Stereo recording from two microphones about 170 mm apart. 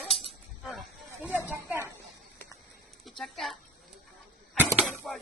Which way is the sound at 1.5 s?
10° right (ahead or behind).